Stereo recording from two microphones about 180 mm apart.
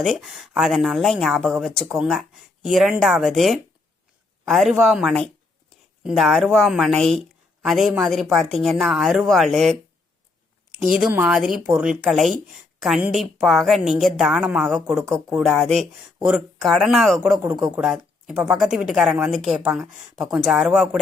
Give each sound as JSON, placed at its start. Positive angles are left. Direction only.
{"t": 0.0, "sound": "a woman's voice", "side_deg": 0}
{"t": 10.9, "sound": "a woman's voice", "side_deg": -5}